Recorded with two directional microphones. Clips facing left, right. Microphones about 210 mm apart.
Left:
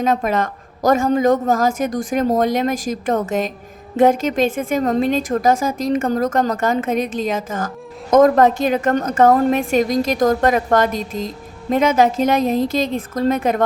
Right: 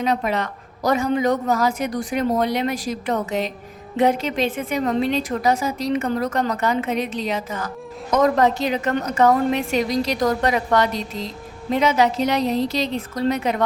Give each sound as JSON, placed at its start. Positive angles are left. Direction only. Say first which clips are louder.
{"t": 0.0, "sound": "a woman's voice", "louder": "left 4 dB", "side_deg": 45}